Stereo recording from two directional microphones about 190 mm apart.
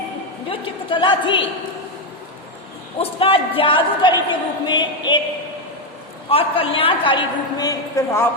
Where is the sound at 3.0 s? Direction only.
30° left (ahead or behind).